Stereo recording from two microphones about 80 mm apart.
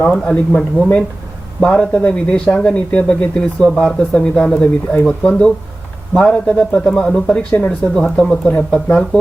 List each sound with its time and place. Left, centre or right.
0.3 s speech: centre